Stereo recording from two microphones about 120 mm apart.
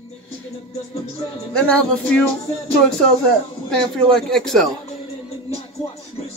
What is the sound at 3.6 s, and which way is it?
Speech, 5° left (ahead or behind).